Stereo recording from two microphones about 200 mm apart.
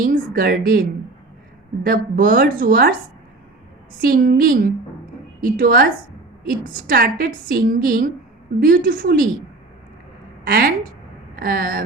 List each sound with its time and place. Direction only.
0.0 s a woman's voice: 45° right (ahead or behind)
4.0 s a woman's voice: 45° right (ahead or behind)
10.4 s a woman's voice: 50° right (ahead or behind)